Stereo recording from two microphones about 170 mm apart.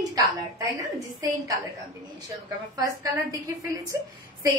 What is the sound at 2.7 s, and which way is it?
A woman's voice, 20° right (ahead or behind).